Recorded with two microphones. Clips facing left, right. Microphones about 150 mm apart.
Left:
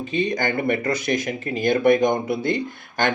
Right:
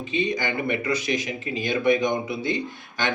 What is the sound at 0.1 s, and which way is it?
Speech, 50° left (ahead or behind).